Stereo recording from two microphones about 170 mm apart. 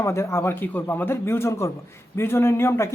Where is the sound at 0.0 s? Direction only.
15° left (ahead or behind).